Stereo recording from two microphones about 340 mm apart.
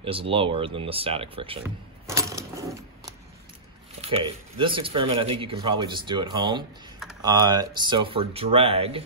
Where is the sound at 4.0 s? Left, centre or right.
Centre.